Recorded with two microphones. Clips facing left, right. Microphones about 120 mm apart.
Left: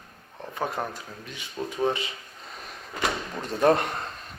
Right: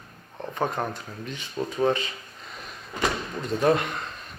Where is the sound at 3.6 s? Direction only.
45° left (ahead or behind).